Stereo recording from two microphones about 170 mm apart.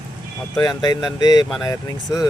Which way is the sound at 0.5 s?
25° left (ahead or behind).